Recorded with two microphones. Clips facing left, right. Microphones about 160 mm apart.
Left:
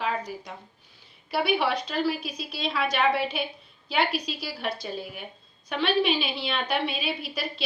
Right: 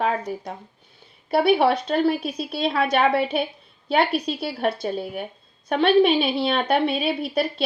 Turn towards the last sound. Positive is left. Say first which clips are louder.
# right 10 dB
turn(degrees=-55)  # may be behind; listen again after turning